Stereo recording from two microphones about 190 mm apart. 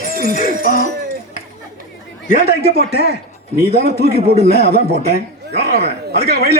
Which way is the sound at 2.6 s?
55° right (ahead or behind).